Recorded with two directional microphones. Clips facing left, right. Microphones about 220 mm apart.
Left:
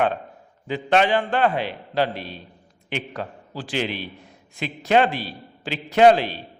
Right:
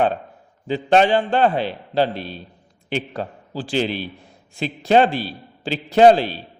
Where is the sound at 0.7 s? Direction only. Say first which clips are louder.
Right 4 dB; 30° right (ahead or behind).